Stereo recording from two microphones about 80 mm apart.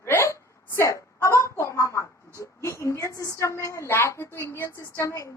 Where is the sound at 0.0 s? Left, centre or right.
Left.